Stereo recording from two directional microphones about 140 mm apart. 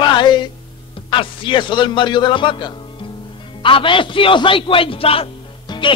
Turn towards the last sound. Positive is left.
turn(degrees=40)  # may be behind; listen again after turning